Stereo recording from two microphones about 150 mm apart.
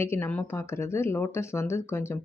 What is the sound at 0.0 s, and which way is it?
Speech, 15° left (ahead or behind).